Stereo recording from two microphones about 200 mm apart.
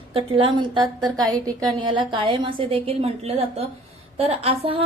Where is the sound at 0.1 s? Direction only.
25° right (ahead or behind).